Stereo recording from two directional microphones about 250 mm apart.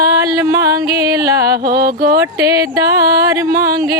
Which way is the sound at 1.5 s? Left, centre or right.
Right.